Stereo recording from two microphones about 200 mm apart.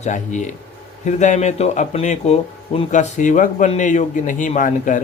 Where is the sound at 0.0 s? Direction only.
40° left (ahead or behind).